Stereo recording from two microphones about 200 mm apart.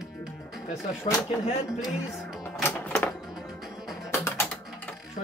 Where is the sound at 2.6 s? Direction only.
10° left (ahead or behind).